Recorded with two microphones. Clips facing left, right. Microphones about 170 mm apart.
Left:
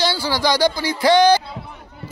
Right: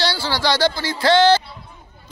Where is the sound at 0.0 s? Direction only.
15° left (ahead or behind).